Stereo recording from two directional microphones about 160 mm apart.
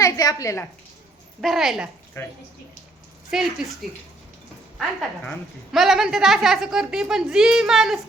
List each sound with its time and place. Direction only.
0.0 s a woman's voice: 20° left (ahead or behind)
1.4 s a woman's voice: centre (ahead or behind)
2.2 s speech: 15° left (ahead or behind)
3.2 s a woman's voice: centre (ahead or behind)
4.8 s a woman's voice: centre (ahead or behind)